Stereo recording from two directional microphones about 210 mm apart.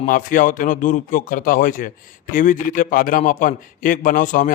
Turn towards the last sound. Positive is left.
turn(degrees=40)  # may be behind; listen again after turning